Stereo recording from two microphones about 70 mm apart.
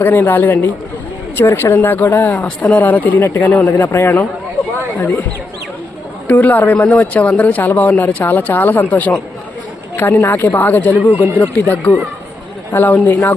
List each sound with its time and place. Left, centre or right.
0.0 s speech: left
6.2 s speech: left